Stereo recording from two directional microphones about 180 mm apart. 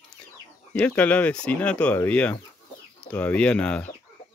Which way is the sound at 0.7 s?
5° left (ahead or behind).